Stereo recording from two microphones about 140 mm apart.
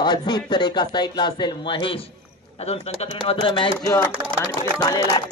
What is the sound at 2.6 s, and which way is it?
A man's voice, 50° left (ahead or behind).